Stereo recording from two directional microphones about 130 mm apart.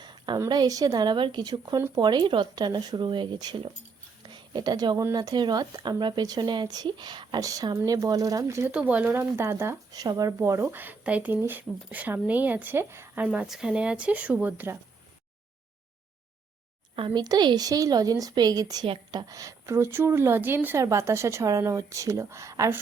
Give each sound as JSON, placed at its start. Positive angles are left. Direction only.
{"t": 0.3, "sound": "speech", "side_deg": -30}
{"t": 4.2, "sound": "a sound", "side_deg": -35}
{"t": 5.1, "sound": "speech", "side_deg": -30}
{"t": 8.7, "sound": "speech", "side_deg": -10}
{"t": 9.9, "sound": "speech", "side_deg": -30}
{"t": 13.2, "sound": "speech", "side_deg": -5}
{"t": 16.9, "sound": "a woman's voice", "side_deg": -40}